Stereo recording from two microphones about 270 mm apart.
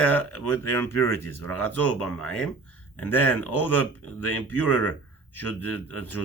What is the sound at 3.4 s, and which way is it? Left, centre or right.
Speech, left.